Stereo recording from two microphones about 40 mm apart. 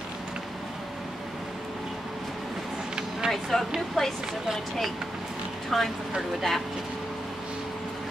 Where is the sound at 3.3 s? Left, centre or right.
Centre.